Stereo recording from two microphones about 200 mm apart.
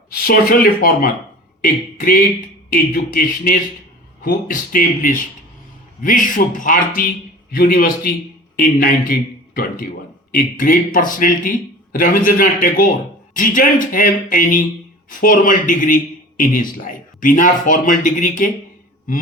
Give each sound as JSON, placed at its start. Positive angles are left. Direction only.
{"t": 0.1, "sound": "a man's voice", "side_deg": 45}
{"t": 10.3, "sound": "a man's voice", "side_deg": 45}